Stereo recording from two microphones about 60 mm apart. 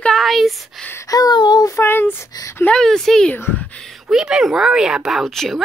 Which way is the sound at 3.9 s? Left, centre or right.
Centre.